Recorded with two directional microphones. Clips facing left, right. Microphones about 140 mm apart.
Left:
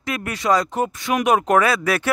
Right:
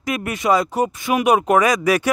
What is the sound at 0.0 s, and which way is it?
Speech, 15° right (ahead or behind).